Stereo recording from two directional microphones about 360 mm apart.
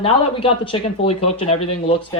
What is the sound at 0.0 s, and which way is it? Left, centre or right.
Speech, centre.